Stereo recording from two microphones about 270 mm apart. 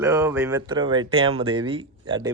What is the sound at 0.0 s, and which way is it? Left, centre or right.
Speech, centre.